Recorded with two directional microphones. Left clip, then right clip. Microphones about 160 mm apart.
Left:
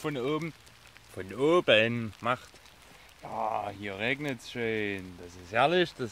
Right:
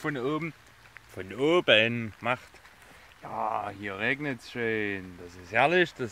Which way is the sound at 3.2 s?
5° left (ahead or behind).